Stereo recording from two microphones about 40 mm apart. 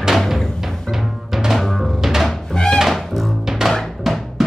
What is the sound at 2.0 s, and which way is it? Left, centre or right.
Music, centre.